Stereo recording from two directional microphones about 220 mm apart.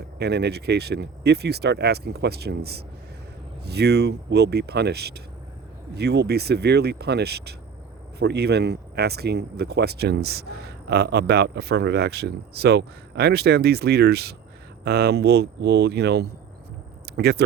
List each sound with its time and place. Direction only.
0.2 s speech: 50° right (ahead or behind)